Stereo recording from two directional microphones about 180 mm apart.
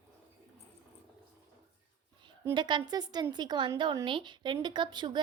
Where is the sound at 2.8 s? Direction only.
25° right (ahead or behind).